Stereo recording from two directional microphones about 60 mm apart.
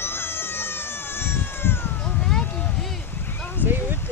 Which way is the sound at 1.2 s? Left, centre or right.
Left.